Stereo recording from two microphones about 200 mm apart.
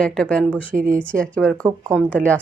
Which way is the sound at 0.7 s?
40° right (ahead or behind).